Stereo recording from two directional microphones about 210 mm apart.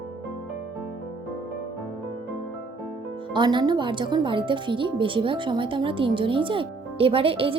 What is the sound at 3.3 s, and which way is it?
A woman's voice, 20° right (ahead or behind).